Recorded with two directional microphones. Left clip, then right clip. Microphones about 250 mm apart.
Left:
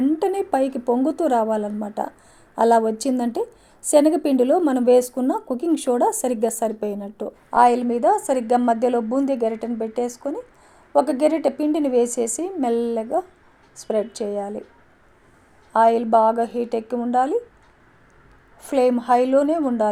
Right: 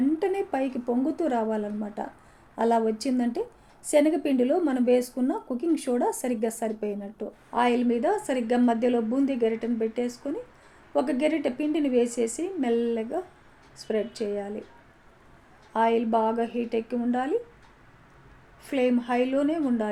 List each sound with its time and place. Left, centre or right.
0.2 s a woman's voice: left
15.7 s a woman's voice: left
18.6 s a woman's voice: left